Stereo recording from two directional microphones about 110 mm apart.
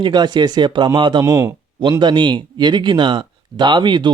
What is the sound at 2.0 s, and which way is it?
Speech, 45° right (ahead or behind).